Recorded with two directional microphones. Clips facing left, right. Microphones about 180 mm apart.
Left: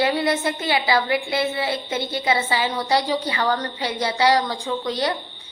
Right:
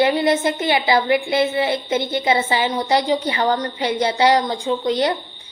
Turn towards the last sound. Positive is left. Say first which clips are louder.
# right 5 dB
turn(degrees=-20)  # may be behind; listen again after turning